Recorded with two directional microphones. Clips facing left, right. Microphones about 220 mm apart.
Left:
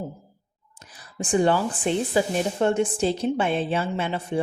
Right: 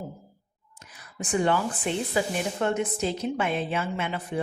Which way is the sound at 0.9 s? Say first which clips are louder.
Left 5 dB; 30° left (ahead or behind).